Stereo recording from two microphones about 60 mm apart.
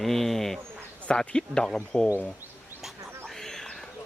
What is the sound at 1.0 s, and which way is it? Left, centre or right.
Speech, centre.